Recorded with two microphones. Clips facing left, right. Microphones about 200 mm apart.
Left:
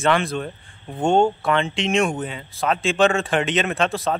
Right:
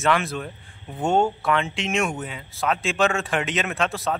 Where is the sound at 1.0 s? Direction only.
30° left (ahead or behind).